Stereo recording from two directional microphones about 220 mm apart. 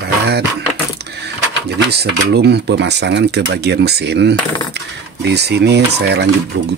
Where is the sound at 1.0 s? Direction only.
50° right (ahead or behind).